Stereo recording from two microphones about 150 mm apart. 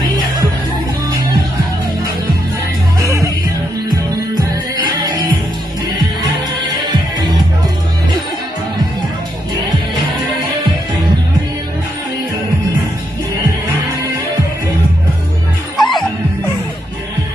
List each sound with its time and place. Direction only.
3.0 s music: 20° right (ahead or behind)
15.8 s music: centre (ahead or behind)